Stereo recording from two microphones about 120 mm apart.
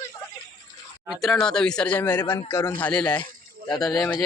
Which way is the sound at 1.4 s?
5° left (ahead or behind).